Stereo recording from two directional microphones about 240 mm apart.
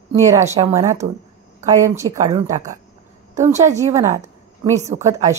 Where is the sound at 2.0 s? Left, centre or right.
Centre.